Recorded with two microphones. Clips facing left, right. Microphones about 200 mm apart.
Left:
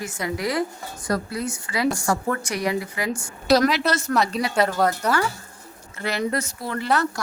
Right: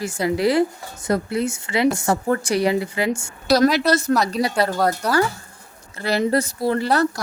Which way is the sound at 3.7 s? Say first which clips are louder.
Right 4 dB; 40° right (ahead or behind).